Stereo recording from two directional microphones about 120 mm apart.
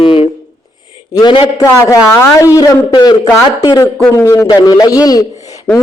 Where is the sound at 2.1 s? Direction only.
20° left (ahead or behind).